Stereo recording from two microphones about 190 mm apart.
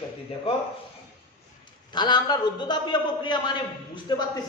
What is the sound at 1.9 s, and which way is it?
A man's voice, 20° left (ahead or behind).